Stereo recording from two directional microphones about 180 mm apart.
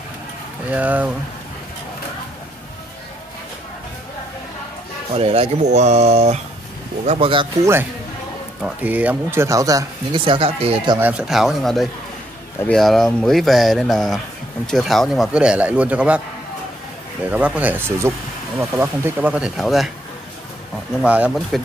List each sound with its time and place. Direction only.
0.7 s speech: 10° right (ahead or behind)
5.1 s speech: 35° right (ahead or behind)
8.6 s speech: 10° right (ahead or behind); by 11.0 s 35° right (ahead or behind)
11.0 s speech: 5° right (ahead or behind)
17.3 s speech: 5° right (ahead or behind)
21.0 s speech: 5° right (ahead or behind)